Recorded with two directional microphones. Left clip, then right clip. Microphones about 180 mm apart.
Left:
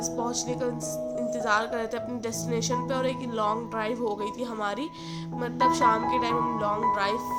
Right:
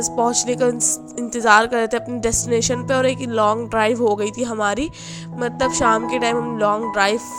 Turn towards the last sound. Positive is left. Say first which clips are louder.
# right 7 dB
turn(degrees=-50)  # may be behind; listen again after turning